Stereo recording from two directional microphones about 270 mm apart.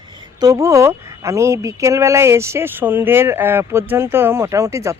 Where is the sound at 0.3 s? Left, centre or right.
Centre.